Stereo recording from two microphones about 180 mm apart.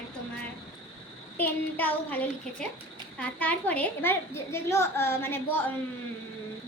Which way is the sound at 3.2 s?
5° left (ahead or behind).